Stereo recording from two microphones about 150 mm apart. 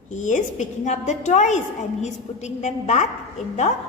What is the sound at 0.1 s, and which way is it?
A woman's voice, 55° left (ahead or behind).